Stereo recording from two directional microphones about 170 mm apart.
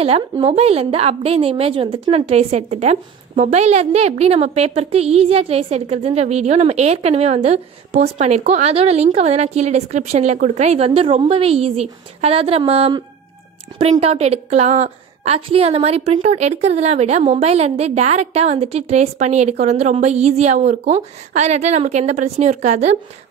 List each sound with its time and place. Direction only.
0.0 s a woman's voice: 35° right (ahead or behind)